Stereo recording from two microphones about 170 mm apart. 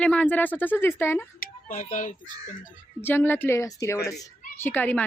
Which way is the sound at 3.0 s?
10° left (ahead or behind).